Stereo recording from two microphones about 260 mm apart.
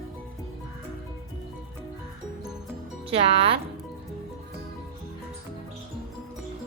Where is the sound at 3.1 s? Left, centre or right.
Right.